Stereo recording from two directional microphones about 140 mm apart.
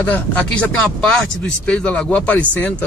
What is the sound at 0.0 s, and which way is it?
Speech, 10° left (ahead or behind).